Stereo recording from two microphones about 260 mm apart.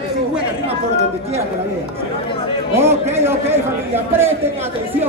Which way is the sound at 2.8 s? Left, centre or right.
Centre.